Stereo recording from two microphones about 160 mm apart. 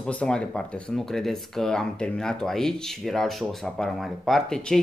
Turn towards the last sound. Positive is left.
turn(degrees=5)  # may be behind; listen again after turning